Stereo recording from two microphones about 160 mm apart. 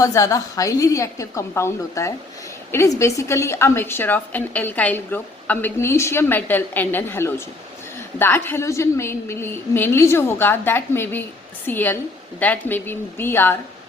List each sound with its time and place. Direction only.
0.0 s a woman's voice: 20° left (ahead or behind)